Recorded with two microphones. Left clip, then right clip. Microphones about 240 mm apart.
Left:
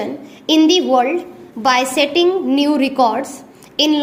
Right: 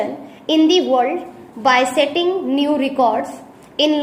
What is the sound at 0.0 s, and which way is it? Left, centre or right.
A woman's voice, left.